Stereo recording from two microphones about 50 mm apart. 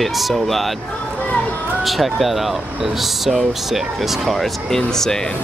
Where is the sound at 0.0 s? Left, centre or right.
Centre.